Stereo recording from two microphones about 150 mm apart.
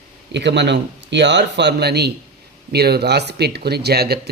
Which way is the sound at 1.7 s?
90° right.